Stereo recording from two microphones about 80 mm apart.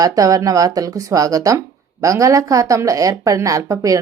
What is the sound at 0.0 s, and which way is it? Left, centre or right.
A woman's voice, right.